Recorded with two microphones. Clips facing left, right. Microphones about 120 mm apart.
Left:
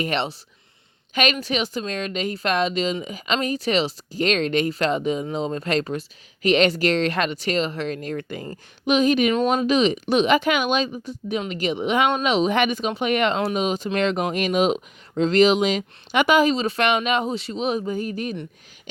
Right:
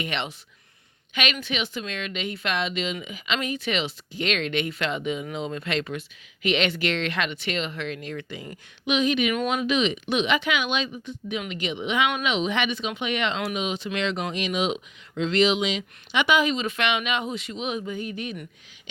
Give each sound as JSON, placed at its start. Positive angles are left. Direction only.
{"t": 0.0, "sound": "speech", "side_deg": 35}